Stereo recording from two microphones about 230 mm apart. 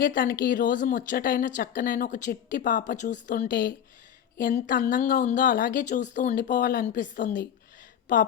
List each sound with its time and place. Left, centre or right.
0.0 s speech: left